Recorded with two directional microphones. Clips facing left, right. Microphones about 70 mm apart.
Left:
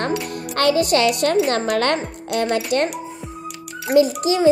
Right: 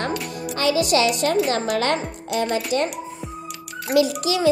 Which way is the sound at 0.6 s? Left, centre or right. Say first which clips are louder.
Left 2 dB; left.